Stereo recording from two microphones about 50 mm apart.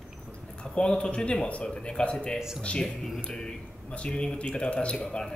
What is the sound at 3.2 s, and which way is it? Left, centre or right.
A man's voice, centre.